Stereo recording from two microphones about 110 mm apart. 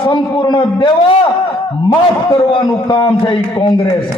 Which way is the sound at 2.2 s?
45° left (ahead or behind).